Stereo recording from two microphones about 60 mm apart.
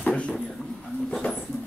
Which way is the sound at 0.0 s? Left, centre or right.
Centre.